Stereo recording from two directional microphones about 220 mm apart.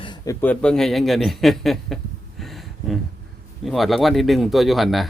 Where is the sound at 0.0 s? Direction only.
20° left (ahead or behind).